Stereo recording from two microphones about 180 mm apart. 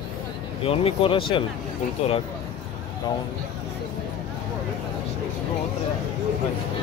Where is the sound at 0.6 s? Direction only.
30° left (ahead or behind).